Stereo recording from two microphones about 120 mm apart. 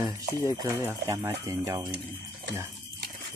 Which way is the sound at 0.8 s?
30° right (ahead or behind).